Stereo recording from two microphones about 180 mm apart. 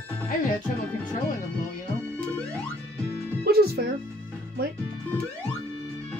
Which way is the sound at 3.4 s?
60° right (ahead or behind).